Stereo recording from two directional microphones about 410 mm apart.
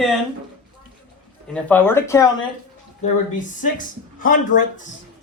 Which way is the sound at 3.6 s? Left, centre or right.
Centre.